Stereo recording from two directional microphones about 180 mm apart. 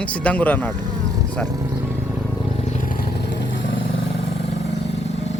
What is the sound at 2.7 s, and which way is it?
Vehicle, 50° left (ahead or behind).